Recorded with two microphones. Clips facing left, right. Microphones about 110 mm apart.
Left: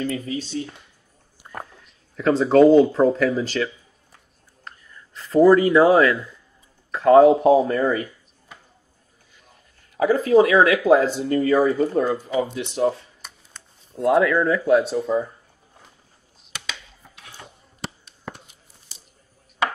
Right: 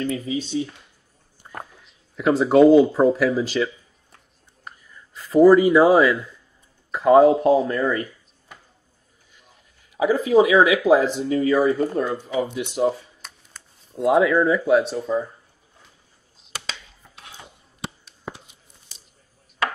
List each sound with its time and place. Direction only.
0.0 s speech: centre (ahead or behind)
1.4 s a sound: centre (ahead or behind)
2.1 s speech: 5° right (ahead or behind)
9.9 s speech: 5° right (ahead or behind)
12.5 s speech: 10° right (ahead or behind)
14.2 s speech: 10° right (ahead or behind)
16.5 s a sound: 35° right (ahead or behind)